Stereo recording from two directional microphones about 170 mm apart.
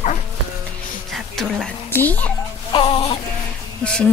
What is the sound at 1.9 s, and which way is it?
Speech, 10° left (ahead or behind).